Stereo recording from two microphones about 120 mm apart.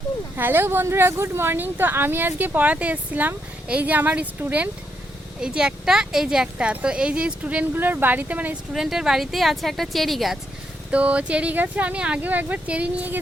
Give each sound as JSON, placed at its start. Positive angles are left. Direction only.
{"t": 0.3, "sound": "speech", "side_deg": -15}
{"t": 8.7, "sound": "speech", "side_deg": -5}
{"t": 10.9, "sound": "speech", "side_deg": -10}